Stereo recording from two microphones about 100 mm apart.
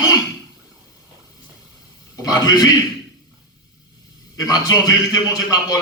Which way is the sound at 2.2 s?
40° left (ahead or behind).